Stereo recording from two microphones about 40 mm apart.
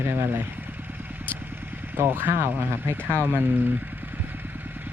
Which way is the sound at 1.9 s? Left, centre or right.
Right.